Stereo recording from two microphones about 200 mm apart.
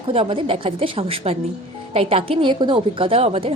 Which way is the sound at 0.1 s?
25° right (ahead or behind).